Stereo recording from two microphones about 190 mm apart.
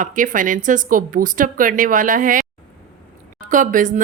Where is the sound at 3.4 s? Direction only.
45° right (ahead or behind).